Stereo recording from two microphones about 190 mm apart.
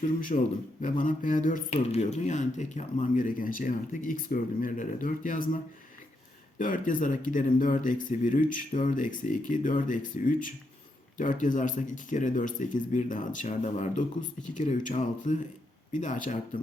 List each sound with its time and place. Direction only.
0.3 s speech: 45° left (ahead or behind)
6.6 s speech: 45° left (ahead or behind)